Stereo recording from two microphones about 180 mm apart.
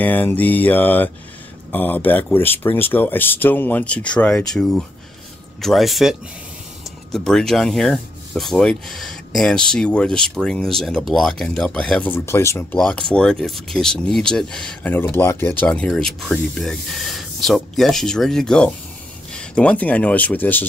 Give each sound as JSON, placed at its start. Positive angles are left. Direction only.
{"t": 0.0, "sound": "speech", "side_deg": 10}
{"t": 12.7, "sound": "speech", "side_deg": 5}